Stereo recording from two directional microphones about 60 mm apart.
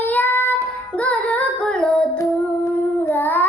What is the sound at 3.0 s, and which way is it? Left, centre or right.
Child singing, left.